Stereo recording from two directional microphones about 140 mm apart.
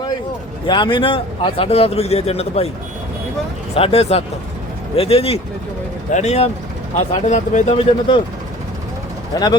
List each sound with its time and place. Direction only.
0.7 s a man's voice: 35° left (ahead or behind)
3.8 s a man's voice: 45° left (ahead or behind)
6.1 s a man's voice: 55° left (ahead or behind)
7.8 s speech: 40° left (ahead or behind)
9.3 s speech: 30° left (ahead or behind)